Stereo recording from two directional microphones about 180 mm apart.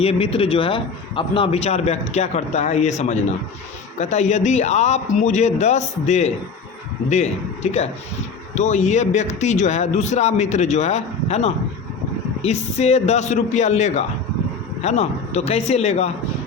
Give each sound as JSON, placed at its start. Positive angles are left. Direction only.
{"t": 0.0, "sound": "speech", "side_deg": 35}
{"t": 3.9, "sound": "speech", "side_deg": 40}